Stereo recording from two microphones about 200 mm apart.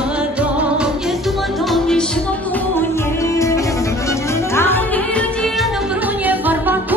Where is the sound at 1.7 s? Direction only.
5° left (ahead or behind).